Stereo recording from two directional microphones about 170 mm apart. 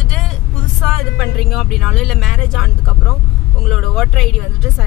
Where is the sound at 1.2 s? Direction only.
Centre (ahead or behind).